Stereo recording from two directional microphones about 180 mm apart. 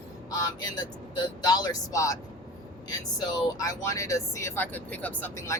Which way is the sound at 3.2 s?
20° left (ahead or behind).